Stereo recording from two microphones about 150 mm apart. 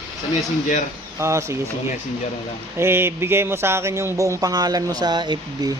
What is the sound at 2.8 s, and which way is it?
Speech, 15° right (ahead or behind).